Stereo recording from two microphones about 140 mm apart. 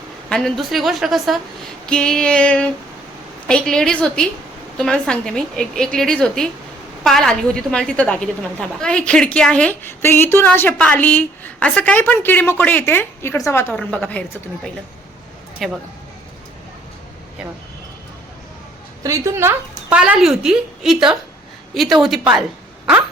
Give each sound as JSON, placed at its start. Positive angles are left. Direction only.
{"t": 0.3, "sound": "a woman's voice", "side_deg": 5}
{"t": 19.0, "sound": "speech", "side_deg": -20}
{"t": 20.0, "sound": "a woman's voice", "side_deg": -5}